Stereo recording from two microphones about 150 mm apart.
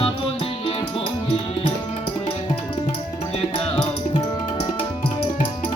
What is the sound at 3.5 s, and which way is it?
Music, 35° left (ahead or behind).